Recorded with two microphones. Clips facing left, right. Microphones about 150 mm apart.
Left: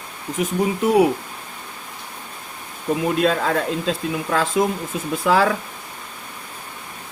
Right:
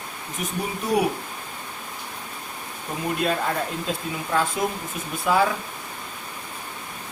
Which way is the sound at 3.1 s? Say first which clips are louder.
Left 2 dB; 90° left.